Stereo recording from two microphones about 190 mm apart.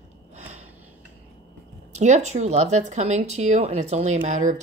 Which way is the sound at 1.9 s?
40° right (ahead or behind).